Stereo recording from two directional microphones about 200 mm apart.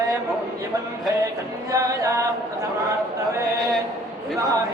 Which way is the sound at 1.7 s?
15° right (ahead or behind).